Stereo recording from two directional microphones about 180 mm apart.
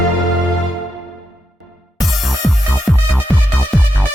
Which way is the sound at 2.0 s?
Centre (ahead or behind).